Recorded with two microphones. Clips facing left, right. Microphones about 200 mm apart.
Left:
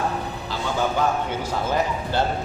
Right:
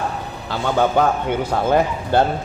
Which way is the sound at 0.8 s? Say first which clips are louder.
Right 5 dB; 60° right (ahead or behind).